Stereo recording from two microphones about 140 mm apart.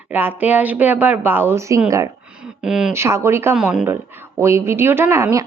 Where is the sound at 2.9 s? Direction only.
20° right (ahead or behind).